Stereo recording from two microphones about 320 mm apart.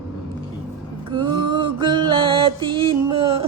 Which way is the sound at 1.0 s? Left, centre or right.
Centre.